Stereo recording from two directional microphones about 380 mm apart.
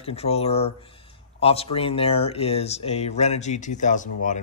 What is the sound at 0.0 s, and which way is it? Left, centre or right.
Speech, centre.